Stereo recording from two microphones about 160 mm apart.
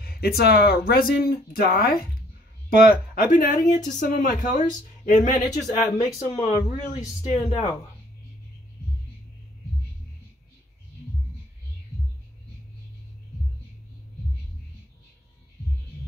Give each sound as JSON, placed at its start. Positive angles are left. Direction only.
{"t": 0.0, "sound": "speech", "side_deg": 70}
{"t": 6.9, "sound": "speech", "side_deg": 40}